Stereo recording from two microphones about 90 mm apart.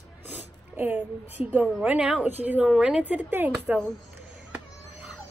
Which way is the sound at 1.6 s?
5° right (ahead or behind).